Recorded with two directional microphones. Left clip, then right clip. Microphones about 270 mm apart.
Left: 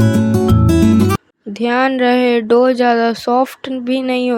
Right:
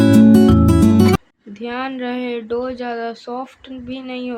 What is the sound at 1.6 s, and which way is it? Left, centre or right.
Speech, left.